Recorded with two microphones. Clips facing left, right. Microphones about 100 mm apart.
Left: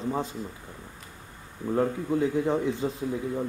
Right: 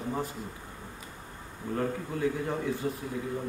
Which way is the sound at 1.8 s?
20° left (ahead or behind).